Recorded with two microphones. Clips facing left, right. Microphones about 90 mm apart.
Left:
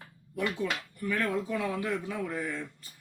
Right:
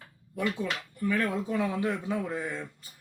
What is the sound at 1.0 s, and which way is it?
Speech, 25° right (ahead or behind).